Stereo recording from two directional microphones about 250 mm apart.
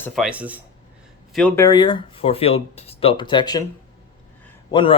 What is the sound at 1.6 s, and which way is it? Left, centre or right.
Speech, centre.